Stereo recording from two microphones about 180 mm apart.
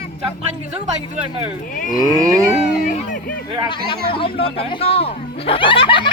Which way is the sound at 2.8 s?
45° left (ahead or behind).